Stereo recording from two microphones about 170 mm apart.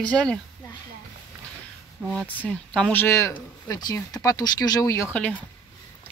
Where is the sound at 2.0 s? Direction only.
Centre (ahead or behind).